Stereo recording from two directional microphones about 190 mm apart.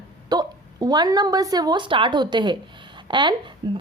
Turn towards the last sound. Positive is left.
turn(degrees=-25)  # may be behind; listen again after turning